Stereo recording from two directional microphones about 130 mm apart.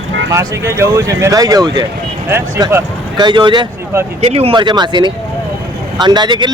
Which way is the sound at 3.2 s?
35° right (ahead or behind).